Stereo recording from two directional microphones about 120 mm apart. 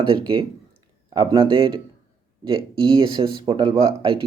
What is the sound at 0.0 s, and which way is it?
Speech, 40° right (ahead or behind).